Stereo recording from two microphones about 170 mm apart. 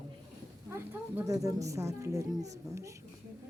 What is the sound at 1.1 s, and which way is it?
A woman's voice, 20° right (ahead or behind).